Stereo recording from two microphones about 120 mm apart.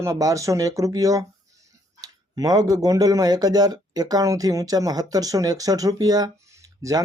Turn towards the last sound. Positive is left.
turn(degrees=-25)  # may be behind; listen again after turning